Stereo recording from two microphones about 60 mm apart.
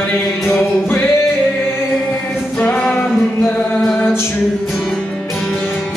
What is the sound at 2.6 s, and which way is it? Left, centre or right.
Music, centre.